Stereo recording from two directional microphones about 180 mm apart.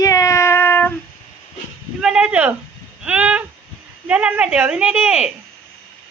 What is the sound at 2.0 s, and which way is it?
Speech, 5° right (ahead or behind).